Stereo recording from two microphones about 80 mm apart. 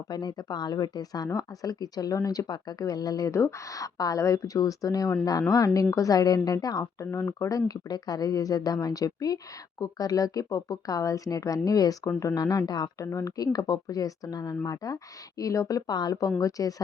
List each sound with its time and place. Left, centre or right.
0.1 s speech: left
7.0 s speech: left
15.9 s speech: left